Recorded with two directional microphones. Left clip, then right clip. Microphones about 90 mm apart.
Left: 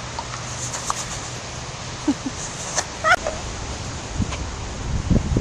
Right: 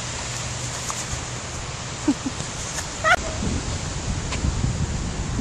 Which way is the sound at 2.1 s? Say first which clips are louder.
Even; 20° left (ahead or behind).